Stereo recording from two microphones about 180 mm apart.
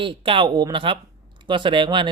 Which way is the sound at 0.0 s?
30° right (ahead or behind).